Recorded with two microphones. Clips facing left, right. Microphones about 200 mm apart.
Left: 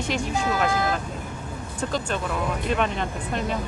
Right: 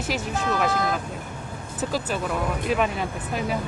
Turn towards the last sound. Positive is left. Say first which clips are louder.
# even
turn(degrees=-5)  # may be behind; listen again after turning